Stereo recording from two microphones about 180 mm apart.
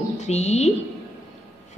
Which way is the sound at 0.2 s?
35° left (ahead or behind).